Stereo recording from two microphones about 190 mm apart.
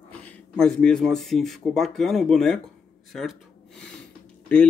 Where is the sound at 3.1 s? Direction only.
Centre (ahead or behind).